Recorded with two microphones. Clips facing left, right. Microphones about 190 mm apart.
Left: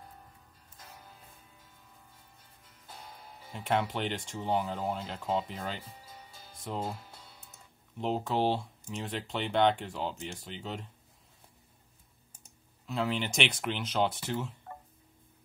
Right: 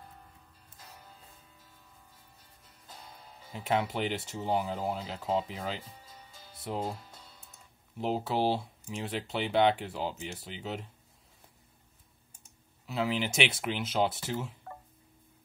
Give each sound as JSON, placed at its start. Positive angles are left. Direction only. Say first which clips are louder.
{"t": 3.5, "sound": "speech", "louder": "even", "side_deg": 0}
{"t": 8.0, "sound": "speech", "louder": "even", "side_deg": -5}
{"t": 12.8, "sound": "speech", "louder": "right 1 dB", "side_deg": -5}